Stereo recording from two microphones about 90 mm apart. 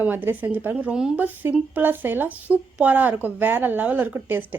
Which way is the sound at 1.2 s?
20° right (ahead or behind).